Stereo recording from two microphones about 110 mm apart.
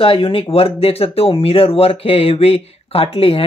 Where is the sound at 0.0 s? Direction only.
55° left (ahead or behind).